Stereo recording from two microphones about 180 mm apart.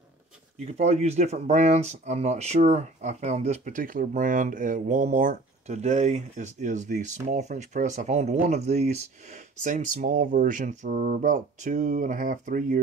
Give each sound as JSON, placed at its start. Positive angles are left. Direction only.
{"t": 0.6, "sound": "speech", "side_deg": -40}